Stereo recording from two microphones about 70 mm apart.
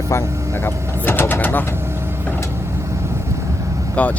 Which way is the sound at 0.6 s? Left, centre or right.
Left.